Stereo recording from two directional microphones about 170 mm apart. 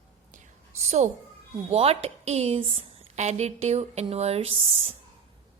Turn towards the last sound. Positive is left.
turn(degrees=-35)  # may be behind; listen again after turning